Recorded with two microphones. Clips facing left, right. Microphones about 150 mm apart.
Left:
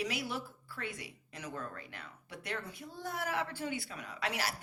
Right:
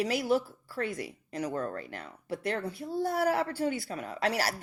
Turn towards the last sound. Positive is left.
turn(degrees=-40)  # may be behind; listen again after turning